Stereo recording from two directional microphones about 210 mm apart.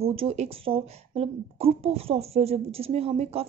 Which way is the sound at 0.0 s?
25° right (ahead or behind).